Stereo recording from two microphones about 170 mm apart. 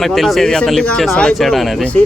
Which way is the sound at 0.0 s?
Centre (ahead or behind).